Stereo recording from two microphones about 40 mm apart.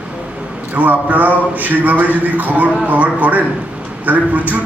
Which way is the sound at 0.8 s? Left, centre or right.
Right.